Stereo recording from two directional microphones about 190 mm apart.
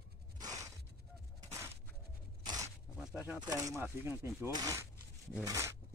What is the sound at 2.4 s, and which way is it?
Scrape, 20° right (ahead or behind).